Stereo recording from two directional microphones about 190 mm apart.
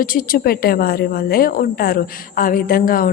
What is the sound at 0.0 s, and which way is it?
A woman's voice, 50° left (ahead or behind).